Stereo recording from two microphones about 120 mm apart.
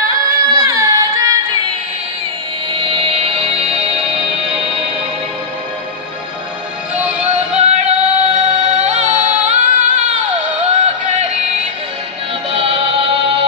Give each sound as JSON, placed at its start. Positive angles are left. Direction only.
{"t": 0.0, "sound": "music", "side_deg": -30}
{"t": 2.8, "sound": "music", "side_deg": -50}
{"t": 7.2, "sound": "music", "side_deg": -65}
{"t": 11.1, "sound": "music", "side_deg": -70}
{"t": 12.4, "sound": "music", "side_deg": -55}